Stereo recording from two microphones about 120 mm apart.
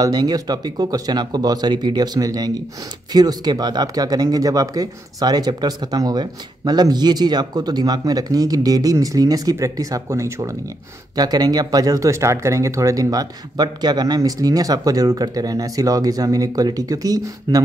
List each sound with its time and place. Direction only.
0.0 s speech: 35° right (ahead or behind)